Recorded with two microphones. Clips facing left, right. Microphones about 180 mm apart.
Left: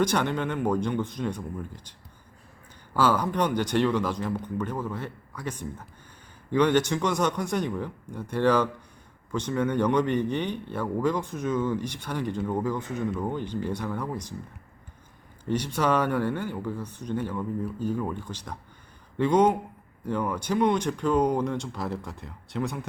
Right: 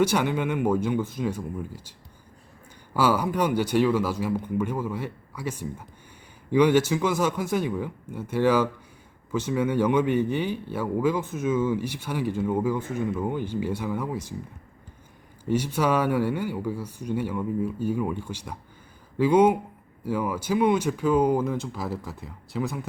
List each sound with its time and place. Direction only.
0.0 s speech: 10° right (ahead or behind)
15.4 s speech: 10° right (ahead or behind)